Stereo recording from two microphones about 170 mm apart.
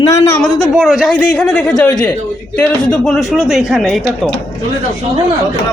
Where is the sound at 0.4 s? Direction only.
Centre (ahead or behind).